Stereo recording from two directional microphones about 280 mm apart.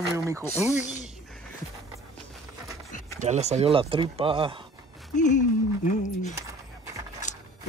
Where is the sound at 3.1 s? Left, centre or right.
Right.